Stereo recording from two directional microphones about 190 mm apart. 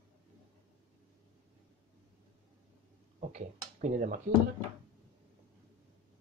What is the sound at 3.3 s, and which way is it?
Speech, 40° right (ahead or behind).